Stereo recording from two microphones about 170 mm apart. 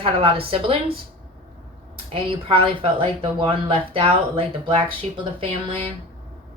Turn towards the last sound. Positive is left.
turn(degrees=-30)  # may be behind; listen again after turning